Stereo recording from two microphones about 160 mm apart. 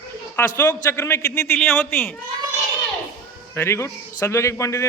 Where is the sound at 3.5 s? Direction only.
15° left (ahead or behind).